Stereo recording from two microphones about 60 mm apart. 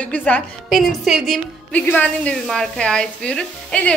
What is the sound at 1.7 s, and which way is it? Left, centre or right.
A woman's voice, left.